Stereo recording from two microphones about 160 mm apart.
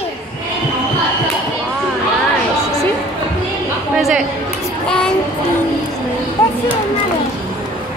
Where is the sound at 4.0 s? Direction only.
Centre (ahead or behind).